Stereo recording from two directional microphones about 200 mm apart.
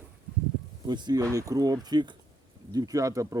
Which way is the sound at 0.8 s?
20° right (ahead or behind).